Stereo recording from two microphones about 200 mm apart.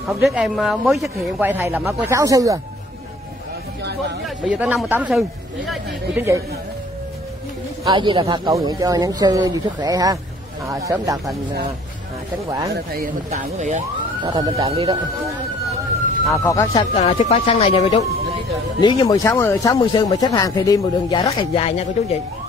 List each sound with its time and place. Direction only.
0.2 s speech: centre (ahead or behind); by 2.6 s 15° right (ahead or behind)
4.5 s speech: 5° right (ahead or behind)
7.8 s speech: 25° right (ahead or behind)
12.4 s speech: 15° right (ahead or behind)
12.7 s speech: 45° right (ahead or behind)
14.2 s speech: 20° right (ahead or behind)
16.3 s speech: 15° left (ahead or behind)
16.9 s speech: 35° left (ahead or behind)